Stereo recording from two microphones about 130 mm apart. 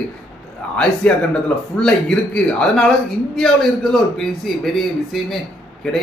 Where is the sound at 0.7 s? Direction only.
10° left (ahead or behind).